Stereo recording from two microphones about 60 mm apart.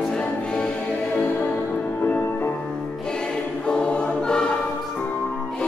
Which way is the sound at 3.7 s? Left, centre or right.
Centre.